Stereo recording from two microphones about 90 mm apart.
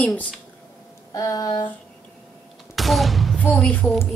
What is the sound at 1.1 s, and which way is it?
Speech, 45° left (ahead or behind).